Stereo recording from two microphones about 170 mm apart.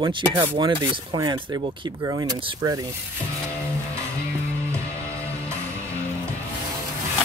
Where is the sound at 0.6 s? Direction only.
30° right (ahead or behind).